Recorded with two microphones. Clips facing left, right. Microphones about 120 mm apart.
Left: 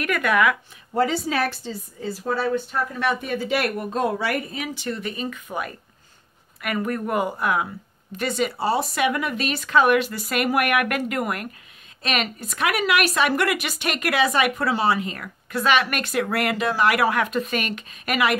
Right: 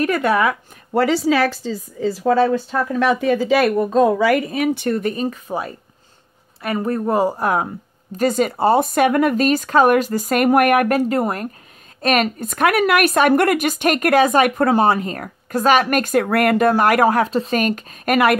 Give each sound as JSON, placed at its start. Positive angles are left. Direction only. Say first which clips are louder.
{"t": 0.0, "sound": "speech", "louder": "right 4 dB", "side_deg": -30}
{"t": 0.9, "sound": "speech", "louder": "right 6 dB", "side_deg": -85}
{"t": 12.0, "sound": "speech", "louder": "right 8 dB", "side_deg": -50}